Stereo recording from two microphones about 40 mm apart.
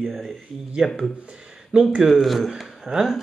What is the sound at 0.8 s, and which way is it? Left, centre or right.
Speech, centre.